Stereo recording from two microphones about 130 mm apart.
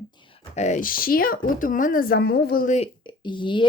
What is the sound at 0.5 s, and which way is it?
Speech, 70° left (ahead or behind).